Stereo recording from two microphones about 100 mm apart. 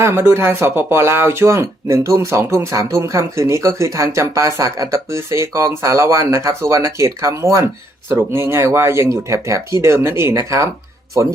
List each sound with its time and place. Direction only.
0.0 s speech: 25° right (ahead or behind)